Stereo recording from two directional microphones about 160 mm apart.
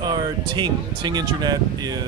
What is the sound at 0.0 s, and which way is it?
Speech, 30° right (ahead or behind).